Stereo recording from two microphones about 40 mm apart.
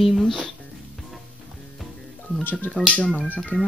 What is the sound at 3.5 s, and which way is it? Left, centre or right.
Speech, left.